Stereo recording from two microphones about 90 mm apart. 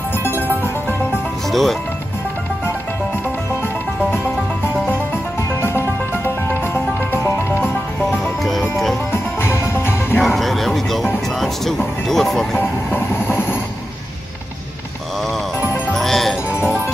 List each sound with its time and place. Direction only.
1.5 s speech: centre (ahead or behind)
5.6 s music: 30° left (ahead or behind)
8.1 s music: centre (ahead or behind)
9.1 s music: 30° left (ahead or behind)
10.2 s a sound: centre (ahead or behind)
11.3 s speech: 5° left (ahead or behind)
12.5 s train: 25° left (ahead or behind)
15.9 s music: 5° left (ahead or behind)